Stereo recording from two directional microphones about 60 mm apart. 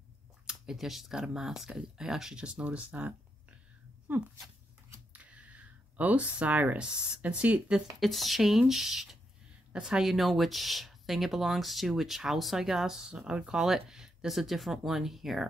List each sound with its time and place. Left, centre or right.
0.5 s speech: centre
2.4 s speech: centre
4.1 s speech: right
5.1 s a sound: right
6.8 s speech: centre
8.0 s speech: centre